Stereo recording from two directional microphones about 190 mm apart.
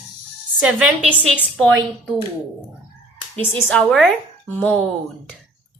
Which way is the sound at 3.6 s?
5° left (ahead or behind).